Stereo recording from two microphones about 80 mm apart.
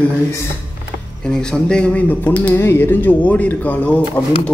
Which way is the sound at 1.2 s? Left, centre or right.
Centre.